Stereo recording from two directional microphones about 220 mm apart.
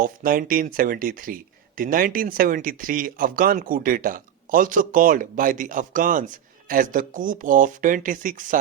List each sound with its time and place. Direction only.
0.0 s speech: 40° right (ahead or behind)